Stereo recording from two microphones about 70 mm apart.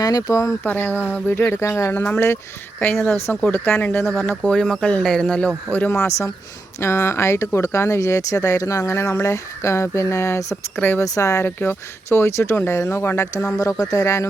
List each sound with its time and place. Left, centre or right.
0.0 s speech: left
0.6 s speech: left
1.5 s speech: left
1.9 s speech: left
2.9 s speech: centre
3.5 s speech: left
4.3 s a man's voice: centre
5.9 s speech: left
10.8 s speech: left
11.0 s speech: left
11.4 s speech: left
13.6 s speech: left